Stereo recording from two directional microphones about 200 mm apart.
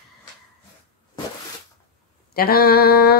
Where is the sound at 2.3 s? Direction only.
50° left (ahead or behind).